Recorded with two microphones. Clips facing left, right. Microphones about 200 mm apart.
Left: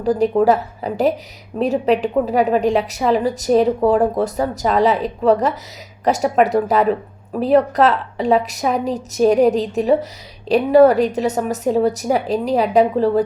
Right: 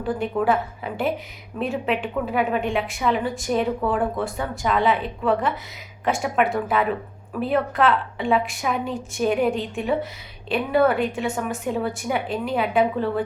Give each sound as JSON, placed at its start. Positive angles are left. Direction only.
{"t": 0.0, "sound": "a woman's voice", "side_deg": 40}